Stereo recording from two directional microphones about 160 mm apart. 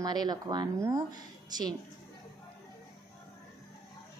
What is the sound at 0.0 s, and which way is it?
A woman's voice, 25° right (ahead or behind).